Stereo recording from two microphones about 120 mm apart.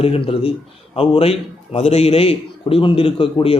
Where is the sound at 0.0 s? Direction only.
50° left (ahead or behind).